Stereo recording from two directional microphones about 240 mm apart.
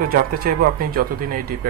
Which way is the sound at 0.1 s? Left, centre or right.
Right.